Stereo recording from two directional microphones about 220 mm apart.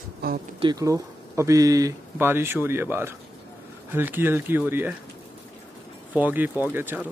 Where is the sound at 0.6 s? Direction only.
20° right (ahead or behind).